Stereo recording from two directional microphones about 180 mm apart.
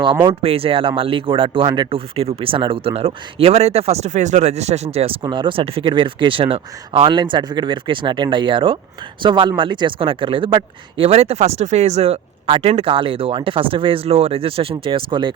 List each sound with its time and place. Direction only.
0.3 s speech: 30° right (ahead or behind)